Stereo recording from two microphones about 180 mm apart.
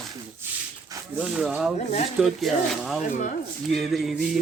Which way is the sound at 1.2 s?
5° right (ahead or behind).